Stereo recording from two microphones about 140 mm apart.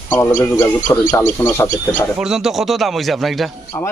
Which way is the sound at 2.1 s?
5° right (ahead or behind).